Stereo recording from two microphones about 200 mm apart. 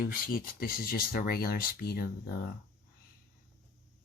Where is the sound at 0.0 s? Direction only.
45° left (ahead or behind).